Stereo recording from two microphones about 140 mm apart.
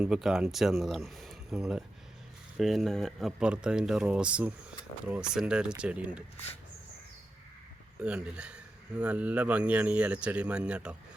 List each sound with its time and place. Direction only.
0.0 s speech: 5° right (ahead or behind)
7.9 s speech: 10° right (ahead or behind)